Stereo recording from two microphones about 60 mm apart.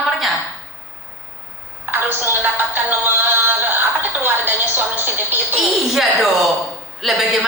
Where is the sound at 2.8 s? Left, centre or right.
Right.